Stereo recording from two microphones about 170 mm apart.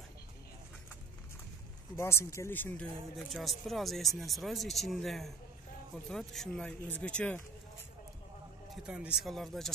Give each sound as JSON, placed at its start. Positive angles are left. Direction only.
{"t": 2.0, "sound": "speech", "side_deg": 15}
{"t": 3.2, "sound": "speech", "side_deg": 0}
{"t": 8.8, "sound": "speech", "side_deg": -5}